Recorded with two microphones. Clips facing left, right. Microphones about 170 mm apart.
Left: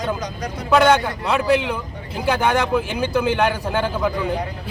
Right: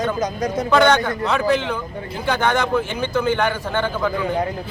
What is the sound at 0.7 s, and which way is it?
Speech, 5° left (ahead or behind).